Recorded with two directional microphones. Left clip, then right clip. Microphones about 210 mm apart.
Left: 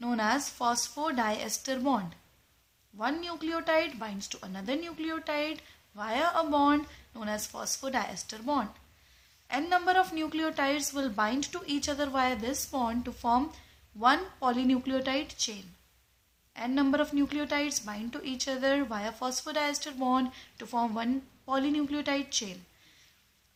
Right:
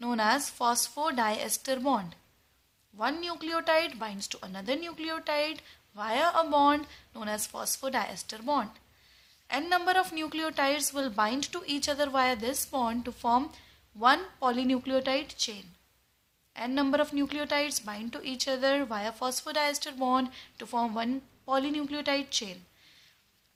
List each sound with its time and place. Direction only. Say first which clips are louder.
0.0 s a woman's voice: right 2 dB; 30° right (ahead or behind)